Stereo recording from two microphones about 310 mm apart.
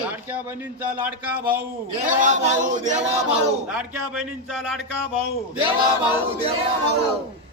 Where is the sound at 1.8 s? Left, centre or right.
Right.